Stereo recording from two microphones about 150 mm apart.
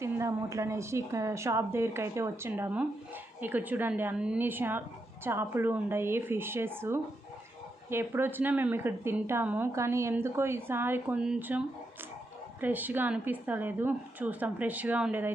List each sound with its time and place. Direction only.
0.0 s a woman's voice: 20° right (ahead or behind)